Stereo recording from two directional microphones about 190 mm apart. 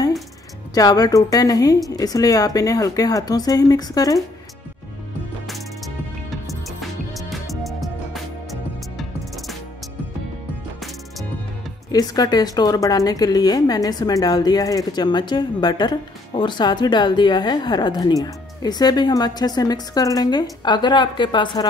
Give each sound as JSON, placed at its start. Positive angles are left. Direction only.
{"t": 0.7, "sound": "a woman's voice", "side_deg": 20}
{"t": 7.2, "sound": "music", "side_deg": 0}
{"t": 11.9, "sound": "a woman's voice", "side_deg": 20}